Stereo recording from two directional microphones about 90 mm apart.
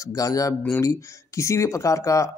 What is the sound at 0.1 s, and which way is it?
Speech, 40° left (ahead or behind).